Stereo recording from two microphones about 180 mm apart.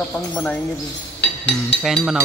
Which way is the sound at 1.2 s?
70° left (ahead or behind).